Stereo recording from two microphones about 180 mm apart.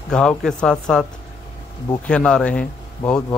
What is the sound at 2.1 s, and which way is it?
A man's voice, 5° left (ahead or behind).